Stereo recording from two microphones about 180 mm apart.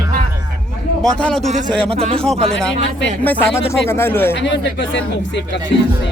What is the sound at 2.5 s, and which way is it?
A man's voice, 5° left (ahead or behind).